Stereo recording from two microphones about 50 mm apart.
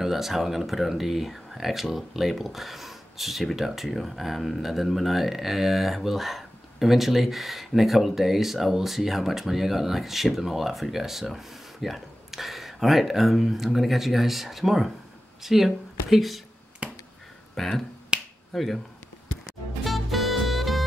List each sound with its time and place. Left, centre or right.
0.0 s speech: centre
16.8 s finger snapping: right
17.6 s speech: centre
18.1 s finger snapping: centre
18.5 s speech: centre
19.4 s music: centre